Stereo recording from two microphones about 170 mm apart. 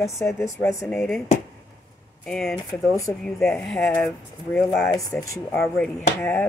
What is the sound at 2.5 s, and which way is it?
Speech, 20° left (ahead or behind).